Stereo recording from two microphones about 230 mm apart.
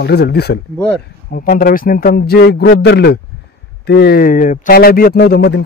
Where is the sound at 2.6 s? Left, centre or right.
Left.